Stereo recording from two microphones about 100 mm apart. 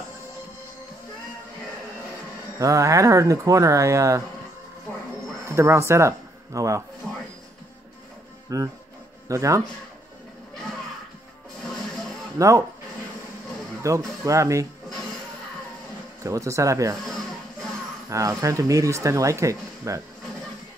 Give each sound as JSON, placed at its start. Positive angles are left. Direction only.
{"t": 2.6, "sound": "speech", "side_deg": -30}
{"t": 5.5, "sound": "speech", "side_deg": -25}
{"t": 8.5, "sound": "speech", "side_deg": -35}
{"t": 12.4, "sound": "speech", "side_deg": -30}
{"t": 13.8, "sound": "speech", "side_deg": -30}
{"t": 16.3, "sound": "speech", "side_deg": -30}
{"t": 18.1, "sound": "speech", "side_deg": -35}